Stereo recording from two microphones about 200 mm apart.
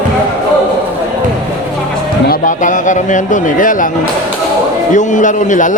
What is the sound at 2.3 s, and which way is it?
A man's voice, 40° left (ahead or behind).